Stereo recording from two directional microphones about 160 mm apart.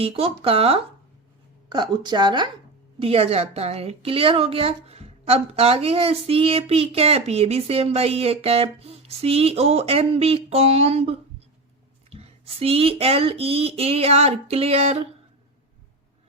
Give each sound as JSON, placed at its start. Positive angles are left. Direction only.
{"t": 0.0, "sound": "a woman's voice", "side_deg": -35}